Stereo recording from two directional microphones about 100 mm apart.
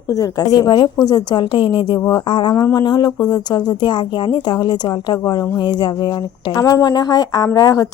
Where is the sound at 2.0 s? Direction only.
45° left (ahead or behind).